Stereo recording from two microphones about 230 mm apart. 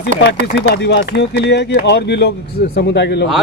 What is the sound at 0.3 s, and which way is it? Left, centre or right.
Speech, left.